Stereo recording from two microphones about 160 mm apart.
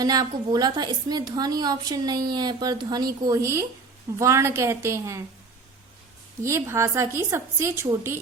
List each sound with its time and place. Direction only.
0.0 s a woman's voice: 25° right (ahead or behind)
6.4 s a woman's voice: 15° right (ahead or behind)